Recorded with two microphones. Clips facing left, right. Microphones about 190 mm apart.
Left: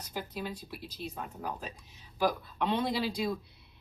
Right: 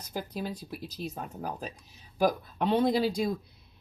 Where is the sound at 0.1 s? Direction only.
40° right (ahead or behind).